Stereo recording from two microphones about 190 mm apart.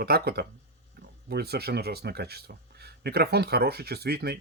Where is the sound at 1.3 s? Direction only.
55° right (ahead or behind).